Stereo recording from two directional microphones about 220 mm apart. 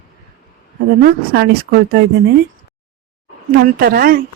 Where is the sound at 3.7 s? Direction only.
40° right (ahead or behind).